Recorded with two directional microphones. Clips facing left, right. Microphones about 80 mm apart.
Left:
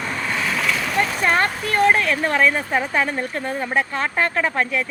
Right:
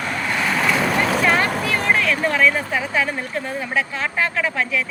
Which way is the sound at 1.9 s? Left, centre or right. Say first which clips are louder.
Even; left.